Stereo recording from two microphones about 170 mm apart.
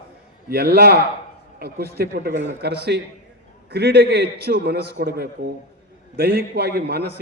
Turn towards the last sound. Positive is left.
turn(degrees=-70)  # may be behind; listen again after turning